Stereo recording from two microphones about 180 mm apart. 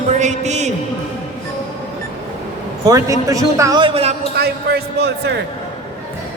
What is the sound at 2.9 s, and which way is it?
Speech, 20° right (ahead or behind).